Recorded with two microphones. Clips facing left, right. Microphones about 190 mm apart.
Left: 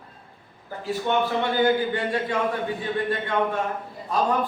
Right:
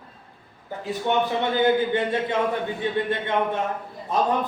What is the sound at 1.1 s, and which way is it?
A man's voice, 15° right (ahead or behind).